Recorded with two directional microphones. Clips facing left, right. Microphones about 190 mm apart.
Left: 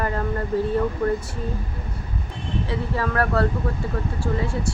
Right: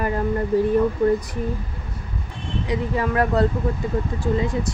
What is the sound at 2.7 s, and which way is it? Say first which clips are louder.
Speech: right 4 dB; 15° right (ahead or behind).